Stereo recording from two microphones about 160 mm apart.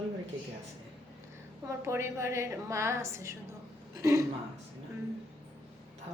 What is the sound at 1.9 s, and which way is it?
A woman's voice, 15° right (ahead or behind).